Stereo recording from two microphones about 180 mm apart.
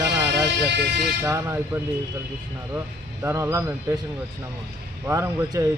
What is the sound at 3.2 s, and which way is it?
Speech, 15° right (ahead or behind).